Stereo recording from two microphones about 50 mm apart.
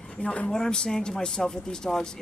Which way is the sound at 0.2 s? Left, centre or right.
Left.